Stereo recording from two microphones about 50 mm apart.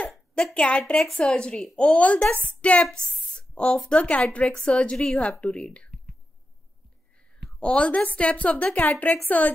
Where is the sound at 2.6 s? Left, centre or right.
Left.